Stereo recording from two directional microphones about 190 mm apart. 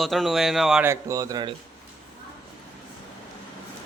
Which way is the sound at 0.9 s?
15° right (ahead or behind).